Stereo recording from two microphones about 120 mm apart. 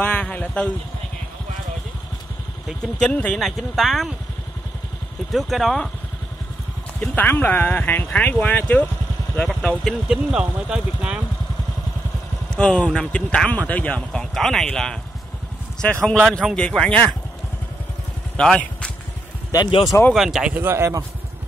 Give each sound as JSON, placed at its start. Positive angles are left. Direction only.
{"t": 0.0, "sound": "speech", "side_deg": 10}
{"t": 2.8, "sound": "speech", "side_deg": 5}
{"t": 5.3, "sound": "speech", "side_deg": 0}
{"t": 7.0, "sound": "speech", "side_deg": 15}
{"t": 12.4, "sound": "speech", "side_deg": 10}
{"t": 18.3, "sound": "a sound", "side_deg": 10}
{"t": 19.5, "sound": "speech", "side_deg": 35}
{"t": 20.1, "sound": "speech", "side_deg": 0}
{"t": 20.5, "sound": "speech", "side_deg": -20}